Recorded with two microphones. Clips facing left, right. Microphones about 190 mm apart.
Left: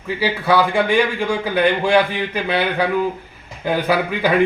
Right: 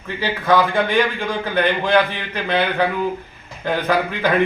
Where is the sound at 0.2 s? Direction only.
10° left (ahead or behind).